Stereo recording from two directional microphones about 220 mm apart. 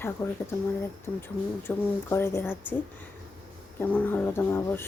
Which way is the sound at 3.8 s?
10° left (ahead or behind).